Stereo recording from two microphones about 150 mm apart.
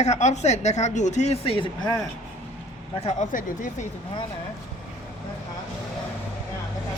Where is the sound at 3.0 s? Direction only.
55° left (ahead or behind).